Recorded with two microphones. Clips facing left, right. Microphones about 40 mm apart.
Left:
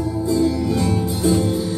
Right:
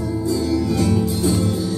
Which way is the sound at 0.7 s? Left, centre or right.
Left.